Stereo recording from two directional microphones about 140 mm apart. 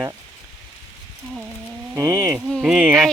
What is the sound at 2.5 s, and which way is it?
Speech, centre (ahead or behind).